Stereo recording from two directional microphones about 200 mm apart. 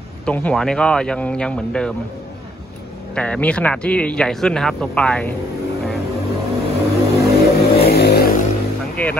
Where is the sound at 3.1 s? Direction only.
5° left (ahead or behind).